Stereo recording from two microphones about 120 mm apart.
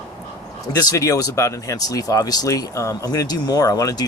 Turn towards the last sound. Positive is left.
turn(degrees=30)  # may be behind; listen again after turning